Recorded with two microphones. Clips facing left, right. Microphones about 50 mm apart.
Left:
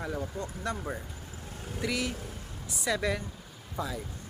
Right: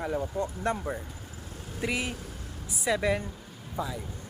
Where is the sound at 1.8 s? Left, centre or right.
Right.